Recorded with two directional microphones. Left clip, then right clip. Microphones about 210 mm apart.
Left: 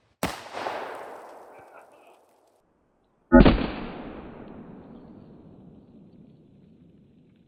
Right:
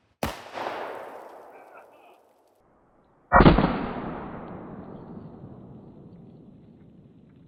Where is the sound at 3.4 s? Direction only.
90° left.